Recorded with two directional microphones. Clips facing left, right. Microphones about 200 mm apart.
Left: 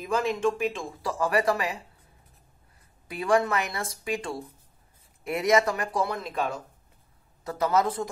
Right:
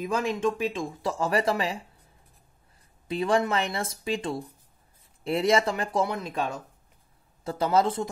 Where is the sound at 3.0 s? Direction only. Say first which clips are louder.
Even; 25° right (ahead or behind).